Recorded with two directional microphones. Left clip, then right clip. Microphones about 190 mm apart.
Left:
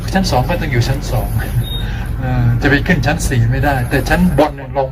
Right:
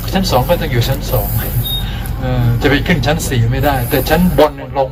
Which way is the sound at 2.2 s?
Centre (ahead or behind).